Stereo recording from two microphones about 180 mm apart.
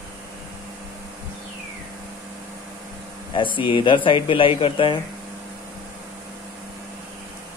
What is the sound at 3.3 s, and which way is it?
Speech, 25° left (ahead or behind).